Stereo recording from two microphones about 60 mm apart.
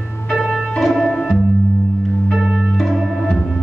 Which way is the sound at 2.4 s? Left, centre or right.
Centre.